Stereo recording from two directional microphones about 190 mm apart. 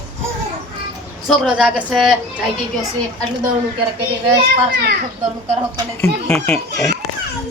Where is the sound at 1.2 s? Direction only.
5° right (ahead or behind).